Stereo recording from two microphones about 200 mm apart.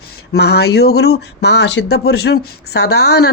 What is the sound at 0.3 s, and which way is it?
Speech, 55° left (ahead or behind).